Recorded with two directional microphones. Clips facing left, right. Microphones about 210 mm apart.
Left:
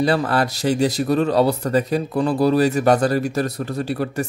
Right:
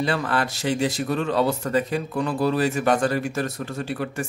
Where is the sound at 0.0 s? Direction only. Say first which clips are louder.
Left 5 dB; 40° left (ahead or behind).